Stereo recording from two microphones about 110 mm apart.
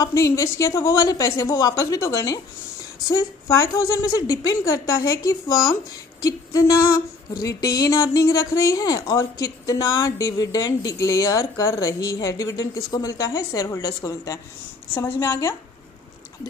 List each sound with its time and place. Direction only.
0.0 s a woman's voice: 30° left (ahead or behind)